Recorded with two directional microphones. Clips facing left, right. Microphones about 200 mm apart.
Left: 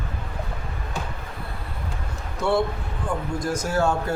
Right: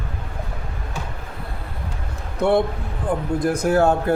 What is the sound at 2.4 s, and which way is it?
A man's voice, 55° right (ahead or behind).